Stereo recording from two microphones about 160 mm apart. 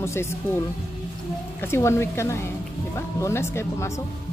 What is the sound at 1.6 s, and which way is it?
Speech, 15° left (ahead or behind).